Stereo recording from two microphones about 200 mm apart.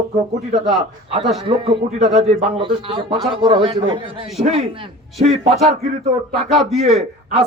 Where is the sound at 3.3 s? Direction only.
25° right (ahead or behind).